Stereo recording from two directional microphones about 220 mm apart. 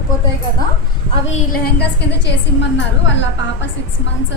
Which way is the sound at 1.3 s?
45° left (ahead or behind).